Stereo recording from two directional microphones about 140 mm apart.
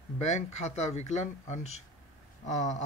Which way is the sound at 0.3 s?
55° left (ahead or behind).